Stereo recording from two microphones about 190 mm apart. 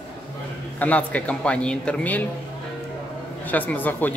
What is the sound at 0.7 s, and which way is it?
Speech, 10° left (ahead or behind).